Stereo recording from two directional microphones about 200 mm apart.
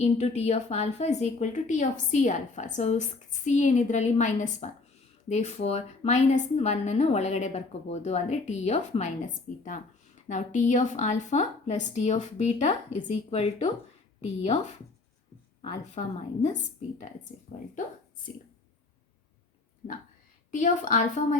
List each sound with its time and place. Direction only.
0.0 s a woman's voice: 30° left (ahead or behind)
15.6 s a woman's voice: 30° left (ahead or behind)
19.8 s a woman's voice: 35° left (ahead or behind)